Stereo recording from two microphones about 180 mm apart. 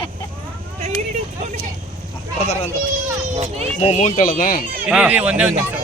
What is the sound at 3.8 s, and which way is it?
Speech, 40° left (ahead or behind).